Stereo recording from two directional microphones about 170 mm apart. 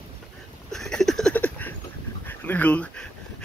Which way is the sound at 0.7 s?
Centre (ahead or behind).